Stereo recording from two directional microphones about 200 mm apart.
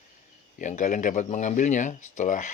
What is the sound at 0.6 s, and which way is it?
Speech, 40° left (ahead or behind).